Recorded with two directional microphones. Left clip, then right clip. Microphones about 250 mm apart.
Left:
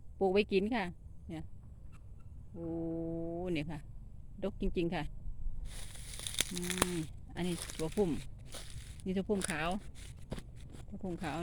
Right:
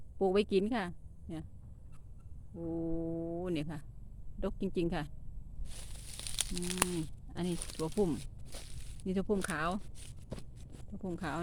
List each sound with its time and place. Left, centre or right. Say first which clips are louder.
0.2 s speech: even; centre
2.6 s speech: right 1 dB; centre
5.7 s a sound: even; centre
7.5 s speech: even; centre
7.8 s speech: right 1 dB; centre
8.5 s a sound: left 1 dB; centre
9.0 s speech: right 1 dB; centre
10.2 s a sound: left 1 dB; centre
11.0 s speech: right 1 dB; centre